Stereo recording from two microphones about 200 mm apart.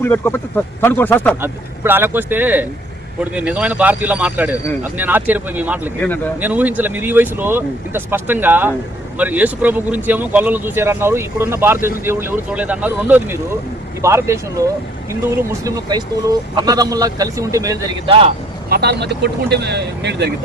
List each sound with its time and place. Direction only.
0.0 s speech: 10° left (ahead or behind)
1.4 s speech: 10° right (ahead or behind); by 18.3 s 25° right (ahead or behind)
18.7 s speech: 55° right (ahead or behind)